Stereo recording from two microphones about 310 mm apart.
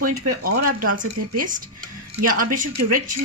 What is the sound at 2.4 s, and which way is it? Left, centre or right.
Speech, right.